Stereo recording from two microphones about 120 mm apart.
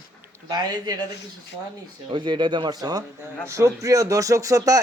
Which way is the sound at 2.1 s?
40° right (ahead or behind).